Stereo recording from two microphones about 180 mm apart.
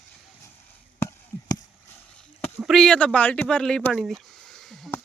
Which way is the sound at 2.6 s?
Centre (ahead or behind).